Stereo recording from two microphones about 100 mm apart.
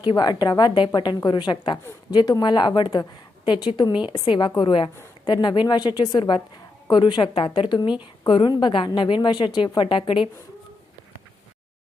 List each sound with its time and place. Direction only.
0.0 s a woman's voice: 45° left (ahead or behind)
9.7 s a woman's voice: 60° left (ahead or behind)